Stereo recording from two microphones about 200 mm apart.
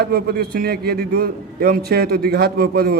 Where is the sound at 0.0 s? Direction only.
50° right (ahead or behind).